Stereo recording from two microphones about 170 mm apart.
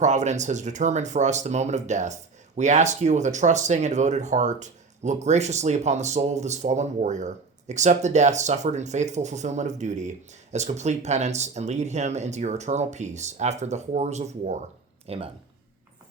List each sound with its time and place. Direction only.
0.0 s speech: 45° right (ahead or behind)